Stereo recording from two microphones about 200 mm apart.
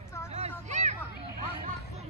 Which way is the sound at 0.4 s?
35° right (ahead or behind).